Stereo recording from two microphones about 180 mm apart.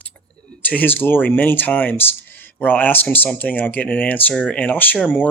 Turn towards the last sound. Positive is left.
turn(degrees=5)  # may be behind; listen again after turning